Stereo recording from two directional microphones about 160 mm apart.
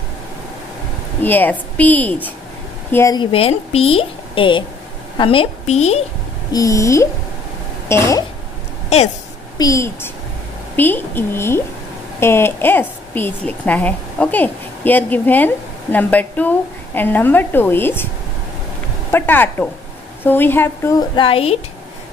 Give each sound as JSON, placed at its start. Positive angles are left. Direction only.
{"t": 1.2, "sound": "a woman's voice", "side_deg": 10}
{"t": 3.2, "sound": "a woman's voice", "side_deg": 35}
{"t": 6.5, "sound": "a woman's voice", "side_deg": 20}
{"t": 8.9, "sound": "speech", "side_deg": 40}
{"t": 9.6, "sound": "a woman's voice", "side_deg": 20}
{"t": 19.1, "sound": "a woman's voice", "side_deg": 10}
{"t": 21.1, "sound": "a woman's voice", "side_deg": 35}